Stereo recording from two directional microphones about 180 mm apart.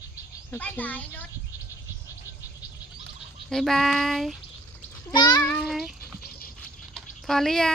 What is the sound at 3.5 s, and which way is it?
Speech, centre (ahead or behind).